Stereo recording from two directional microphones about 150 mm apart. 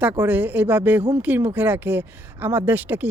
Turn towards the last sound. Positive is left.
turn(degrees=-10)  # may be behind; listen again after turning